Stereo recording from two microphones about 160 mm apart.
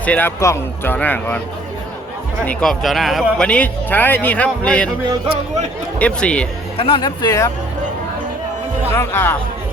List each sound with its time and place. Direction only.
0.0 s speech: 10° left (ahead or behind)
2.4 s speech: 5° left (ahead or behind)
6.0 s speech: 5° left (ahead or behind)
6.7 s speech: 35° left (ahead or behind)
9.0 s speech: 15° left (ahead or behind)